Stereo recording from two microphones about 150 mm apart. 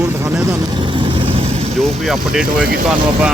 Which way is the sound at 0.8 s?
35° right (ahead or behind).